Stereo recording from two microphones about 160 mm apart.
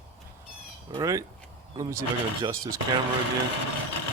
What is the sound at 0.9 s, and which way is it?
Speech, 20° right (ahead or behind).